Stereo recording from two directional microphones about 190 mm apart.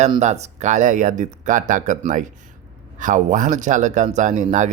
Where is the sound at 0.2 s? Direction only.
35° right (ahead or behind).